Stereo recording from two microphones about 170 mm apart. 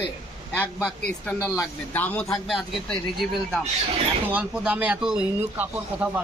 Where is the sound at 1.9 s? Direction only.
10° left (ahead or behind).